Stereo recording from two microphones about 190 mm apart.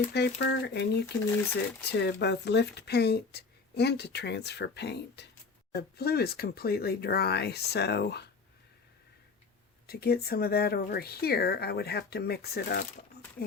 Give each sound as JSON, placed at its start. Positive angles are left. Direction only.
{"t": 0.1, "sound": "speech", "side_deg": 60}
{"t": 9.8, "sound": "speech", "side_deg": 55}